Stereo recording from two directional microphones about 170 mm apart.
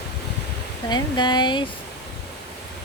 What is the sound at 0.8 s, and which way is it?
Speech, 25° left (ahead or behind).